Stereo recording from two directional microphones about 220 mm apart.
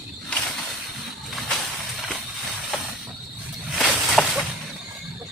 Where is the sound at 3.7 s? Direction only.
Centre (ahead or behind).